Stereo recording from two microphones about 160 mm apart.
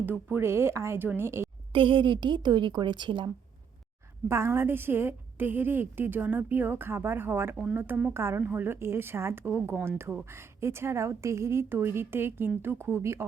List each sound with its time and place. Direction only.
0.0 s a woman's voice: 10° right (ahead or behind)
1.7 s a woman's voice: 30° right (ahead or behind)
4.3 s a woman's voice: 15° right (ahead or behind)